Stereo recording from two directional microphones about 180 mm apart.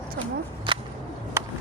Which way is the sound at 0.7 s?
30° right (ahead or behind).